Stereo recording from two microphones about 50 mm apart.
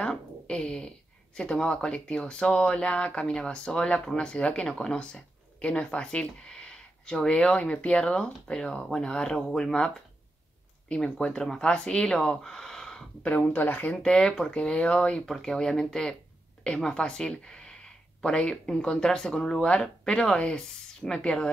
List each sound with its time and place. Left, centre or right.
0.0 s speech: centre
13.2 s speech: left
13.9 s speech: centre
15.2 s speech: centre